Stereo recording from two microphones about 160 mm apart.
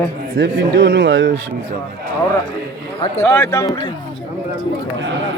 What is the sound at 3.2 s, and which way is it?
Speech, 15° left (ahead or behind).